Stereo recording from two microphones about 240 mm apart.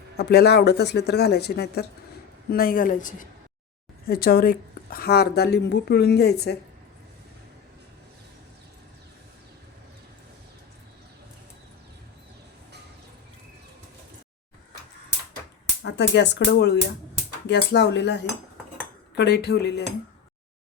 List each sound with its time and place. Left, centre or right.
0.2 s a woman's voice: left
15.8 s speech: left